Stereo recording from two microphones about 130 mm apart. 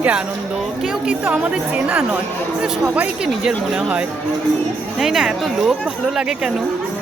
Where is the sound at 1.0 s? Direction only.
10° right (ahead or behind).